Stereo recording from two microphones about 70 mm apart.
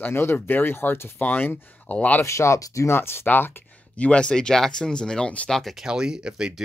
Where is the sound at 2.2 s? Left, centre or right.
Left.